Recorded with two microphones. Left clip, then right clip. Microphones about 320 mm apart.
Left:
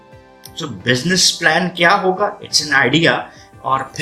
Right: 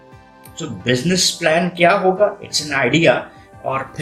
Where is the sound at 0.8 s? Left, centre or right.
Centre.